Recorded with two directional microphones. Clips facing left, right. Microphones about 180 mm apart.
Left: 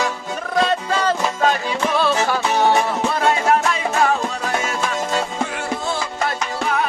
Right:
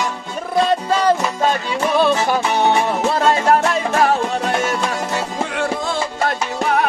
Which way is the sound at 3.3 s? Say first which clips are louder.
Right 2 dB; 35° right (ahead or behind).